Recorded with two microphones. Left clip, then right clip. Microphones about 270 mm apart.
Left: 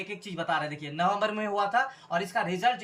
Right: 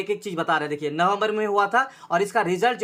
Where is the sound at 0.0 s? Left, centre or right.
Centre.